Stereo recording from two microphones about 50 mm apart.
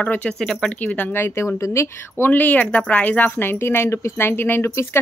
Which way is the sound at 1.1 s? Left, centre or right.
Left.